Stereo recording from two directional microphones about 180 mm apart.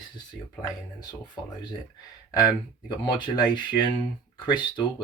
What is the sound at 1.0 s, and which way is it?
Speech, 25° left (ahead or behind).